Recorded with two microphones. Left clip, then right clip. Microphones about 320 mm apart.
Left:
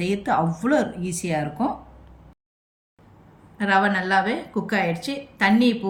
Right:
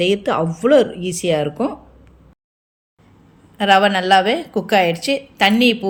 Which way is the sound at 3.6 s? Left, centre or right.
Centre.